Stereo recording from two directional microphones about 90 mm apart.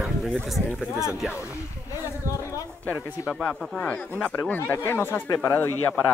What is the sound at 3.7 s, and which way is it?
Speech, 15° left (ahead or behind).